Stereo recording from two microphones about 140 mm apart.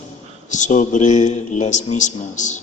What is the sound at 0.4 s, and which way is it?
A man's voice, 60° left (ahead or behind).